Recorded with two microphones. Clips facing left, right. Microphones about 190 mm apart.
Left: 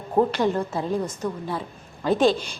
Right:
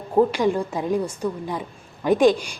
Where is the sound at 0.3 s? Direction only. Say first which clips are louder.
Right 2 dB; 10° right (ahead or behind).